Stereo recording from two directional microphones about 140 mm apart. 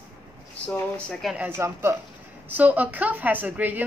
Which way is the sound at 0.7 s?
5° left (ahead or behind).